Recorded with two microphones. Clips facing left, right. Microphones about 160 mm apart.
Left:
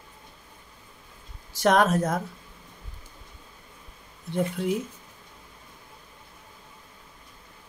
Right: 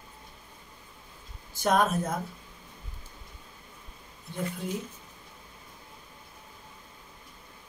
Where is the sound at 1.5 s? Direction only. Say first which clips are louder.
Left 4 dB; 90° left.